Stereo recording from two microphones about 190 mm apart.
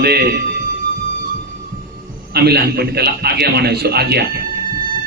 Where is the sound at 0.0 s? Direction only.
55° right (ahead or behind).